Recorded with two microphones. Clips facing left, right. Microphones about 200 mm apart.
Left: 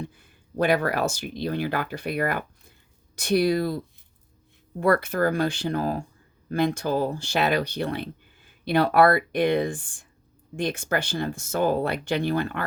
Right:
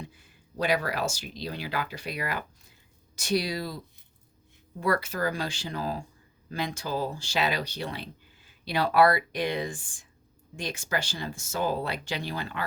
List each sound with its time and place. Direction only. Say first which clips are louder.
0.0 s speech: left 7 dB; 55° left (ahead or behind)
4.8 s speech: left 6 dB; 55° left (ahead or behind)